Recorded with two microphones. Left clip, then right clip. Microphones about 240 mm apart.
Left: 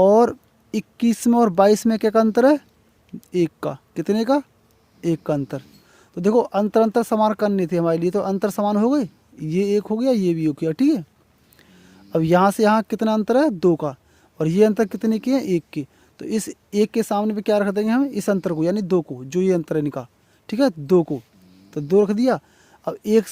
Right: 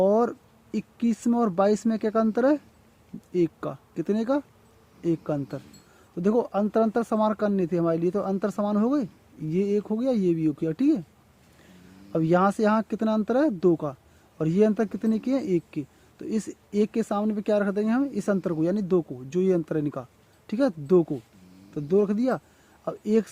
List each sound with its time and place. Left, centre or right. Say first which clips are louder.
0.0 s speech: left 7 dB; left
12.1 s speech: left 5 dB; left